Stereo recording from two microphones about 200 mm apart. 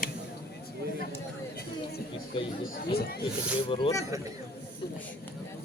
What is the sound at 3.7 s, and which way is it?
Speech, 20° left (ahead or behind).